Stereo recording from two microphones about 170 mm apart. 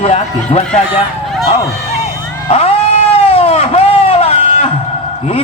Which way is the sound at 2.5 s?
35° left (ahead or behind).